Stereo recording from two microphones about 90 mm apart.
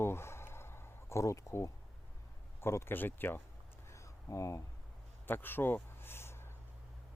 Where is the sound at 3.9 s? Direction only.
35° left (ahead or behind).